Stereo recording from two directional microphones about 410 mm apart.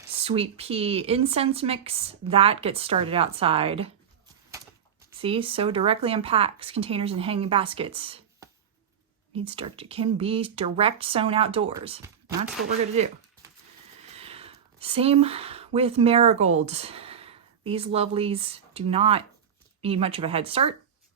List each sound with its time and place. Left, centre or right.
0.2 s speech: centre
5.2 s speech: centre